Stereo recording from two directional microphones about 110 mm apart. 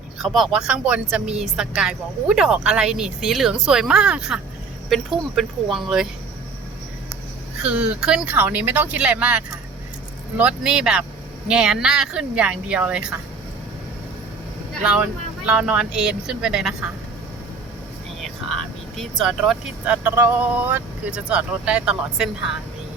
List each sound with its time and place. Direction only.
0.2 s a woman's voice: centre (ahead or behind)
7.6 s speech: 10° right (ahead or behind)
14.8 s speech: 10° right (ahead or behind)
18.2 s vehicle: centre (ahead or behind)
19.8 s speech: 15° right (ahead or behind)